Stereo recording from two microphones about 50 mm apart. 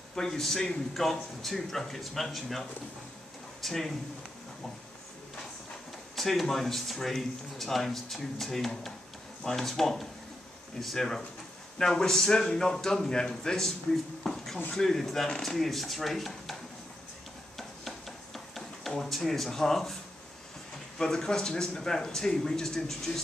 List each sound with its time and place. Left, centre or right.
0.1 s speech: centre
3.6 s speech: centre
6.1 s speech: centre
14.2 s a sound: centre
14.7 s speech: centre
17.6 s a sound: centre
21.0 s speech: centre